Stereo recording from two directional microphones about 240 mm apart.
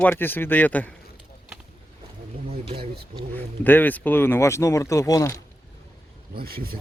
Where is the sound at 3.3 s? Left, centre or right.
Centre.